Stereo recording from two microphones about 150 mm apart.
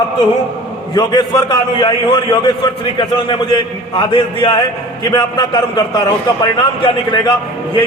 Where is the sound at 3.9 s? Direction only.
35° left (ahead or behind).